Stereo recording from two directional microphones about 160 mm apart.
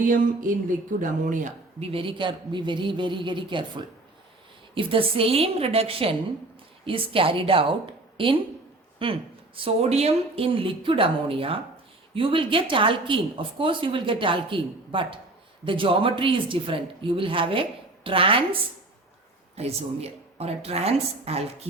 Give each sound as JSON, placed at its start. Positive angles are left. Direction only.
{"t": 0.0, "sound": "speech", "side_deg": -60}
{"t": 1.9, "sound": "a woman's voice", "side_deg": -35}
{"t": 4.7, "sound": "a woman's voice", "side_deg": -35}
{"t": 19.5, "sound": "a woman's voice", "side_deg": -40}